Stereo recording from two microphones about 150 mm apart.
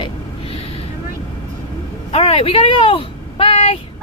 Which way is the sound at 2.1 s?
40° left (ahead or behind).